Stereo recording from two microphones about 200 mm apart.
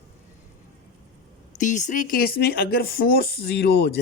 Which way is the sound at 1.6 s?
40° left (ahead or behind).